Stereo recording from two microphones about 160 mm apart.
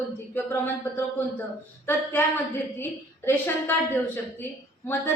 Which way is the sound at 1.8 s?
10° left (ahead or behind).